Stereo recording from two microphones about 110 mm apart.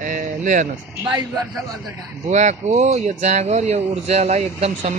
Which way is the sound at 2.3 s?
90° right.